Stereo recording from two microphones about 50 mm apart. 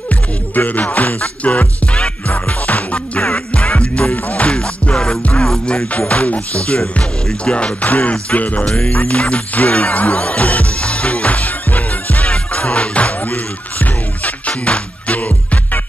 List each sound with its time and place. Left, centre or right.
0.6 s music: left
3.2 s music: centre
4.6 s music: centre
5.9 s music: left
8.6 s music: centre
8.9 s music: left